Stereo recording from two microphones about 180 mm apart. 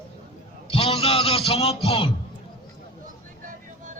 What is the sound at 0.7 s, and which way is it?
Music, 30° left (ahead or behind).